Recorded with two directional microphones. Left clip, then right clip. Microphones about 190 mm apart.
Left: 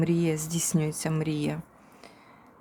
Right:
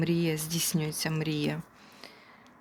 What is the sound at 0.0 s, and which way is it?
Speech, 15° left (ahead or behind).